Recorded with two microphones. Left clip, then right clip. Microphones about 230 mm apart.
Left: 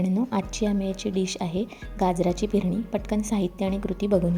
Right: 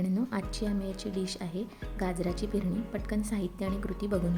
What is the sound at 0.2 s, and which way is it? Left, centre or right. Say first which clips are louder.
Speech: left 7 dB; centre.